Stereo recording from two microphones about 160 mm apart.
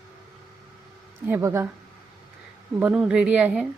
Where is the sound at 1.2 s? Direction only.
15° right (ahead or behind).